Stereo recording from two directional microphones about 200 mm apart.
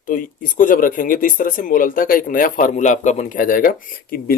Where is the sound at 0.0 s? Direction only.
45° left (ahead or behind).